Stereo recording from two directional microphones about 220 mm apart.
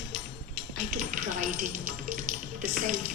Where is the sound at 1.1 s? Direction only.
35° right (ahead or behind).